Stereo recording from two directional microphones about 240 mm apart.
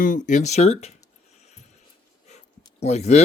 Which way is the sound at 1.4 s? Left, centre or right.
Left.